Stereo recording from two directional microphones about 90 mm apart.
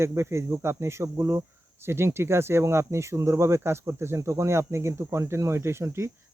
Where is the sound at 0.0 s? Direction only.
30° right (ahead or behind).